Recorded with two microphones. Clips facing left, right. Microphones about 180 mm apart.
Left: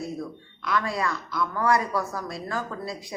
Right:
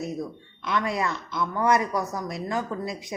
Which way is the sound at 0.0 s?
20° right (ahead or behind).